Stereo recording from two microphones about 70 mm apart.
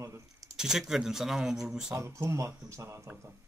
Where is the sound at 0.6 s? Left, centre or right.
Centre.